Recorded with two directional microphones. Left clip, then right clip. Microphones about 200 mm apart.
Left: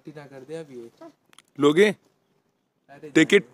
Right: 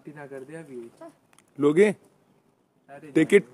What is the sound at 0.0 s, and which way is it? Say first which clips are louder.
Speech: right 2 dB; 50° left (ahead or behind).